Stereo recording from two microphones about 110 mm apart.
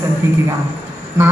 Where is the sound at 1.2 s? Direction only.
25° right (ahead or behind).